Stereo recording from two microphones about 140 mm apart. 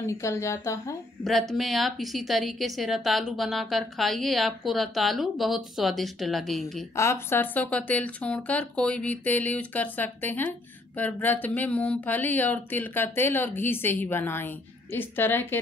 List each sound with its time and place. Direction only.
0.2 s speech: 20° left (ahead or behind)
1.5 s a woman's voice: centre (ahead or behind)
7.0 s speech: 20° left (ahead or behind)